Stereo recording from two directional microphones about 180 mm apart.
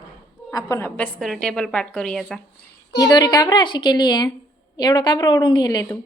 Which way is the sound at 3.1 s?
20° left (ahead or behind).